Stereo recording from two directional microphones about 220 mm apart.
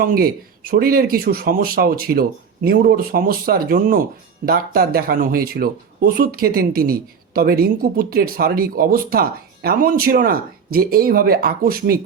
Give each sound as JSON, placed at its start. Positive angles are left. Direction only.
{"t": 0.0, "sound": "speech", "side_deg": -40}